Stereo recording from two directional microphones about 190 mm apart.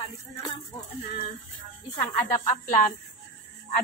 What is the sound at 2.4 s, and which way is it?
Speech, 40° left (ahead or behind).